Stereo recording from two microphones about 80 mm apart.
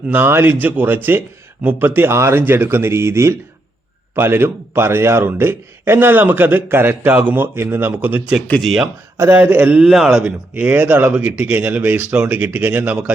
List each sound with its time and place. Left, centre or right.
0.1 s speech: right
8.6 s a man's voice: centre
9.3 s a man's voice: right; by 10.3 s centre
10.5 s speech: right